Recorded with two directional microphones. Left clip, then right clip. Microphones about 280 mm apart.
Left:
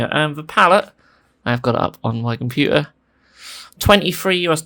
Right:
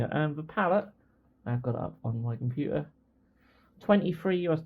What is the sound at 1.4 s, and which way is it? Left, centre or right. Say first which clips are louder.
Speech: left 17 dB; left.